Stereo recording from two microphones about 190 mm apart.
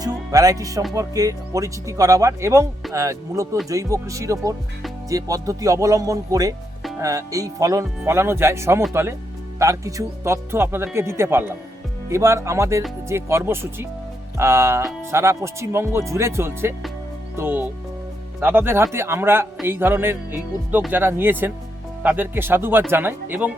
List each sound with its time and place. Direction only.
0.0 s music: 20° right (ahead or behind)
0.9 s speech: 15° right (ahead or behind)